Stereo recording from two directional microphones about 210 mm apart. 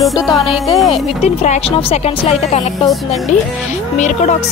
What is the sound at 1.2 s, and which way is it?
A woman's voice, 30° left (ahead or behind).